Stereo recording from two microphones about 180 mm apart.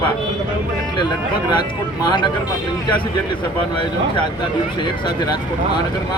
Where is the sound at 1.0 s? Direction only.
25° left (ahead or behind).